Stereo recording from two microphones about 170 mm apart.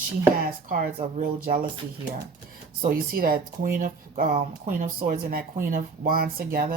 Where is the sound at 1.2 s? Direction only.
55° right (ahead or behind).